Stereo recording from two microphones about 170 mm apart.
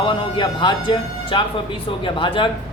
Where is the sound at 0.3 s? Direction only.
25° left (ahead or behind).